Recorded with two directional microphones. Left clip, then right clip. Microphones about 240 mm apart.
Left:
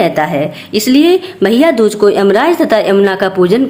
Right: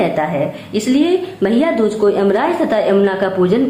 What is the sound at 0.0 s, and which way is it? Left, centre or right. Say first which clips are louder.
Speech: left 4 dB; left.